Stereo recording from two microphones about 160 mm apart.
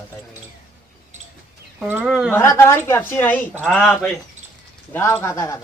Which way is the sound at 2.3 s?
15° left (ahead or behind).